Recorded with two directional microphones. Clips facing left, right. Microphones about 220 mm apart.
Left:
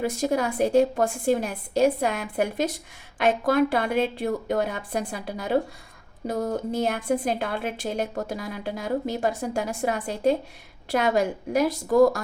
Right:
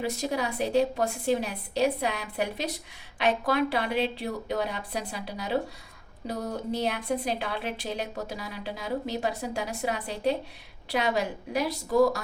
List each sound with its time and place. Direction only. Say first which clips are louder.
0.0 s a woman's voice: left 5 dB; 50° left (ahead or behind)